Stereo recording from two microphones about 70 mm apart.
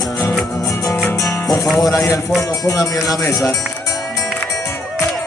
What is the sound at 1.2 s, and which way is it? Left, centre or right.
Music, left.